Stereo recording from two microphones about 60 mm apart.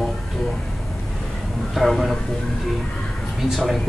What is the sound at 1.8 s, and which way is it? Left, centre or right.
Speech, centre.